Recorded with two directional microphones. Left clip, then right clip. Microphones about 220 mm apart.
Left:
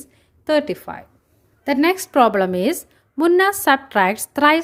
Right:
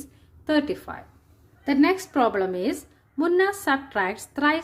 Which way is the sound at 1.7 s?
50° left (ahead or behind).